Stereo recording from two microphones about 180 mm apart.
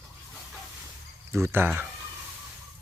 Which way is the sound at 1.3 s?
15° right (ahead or behind).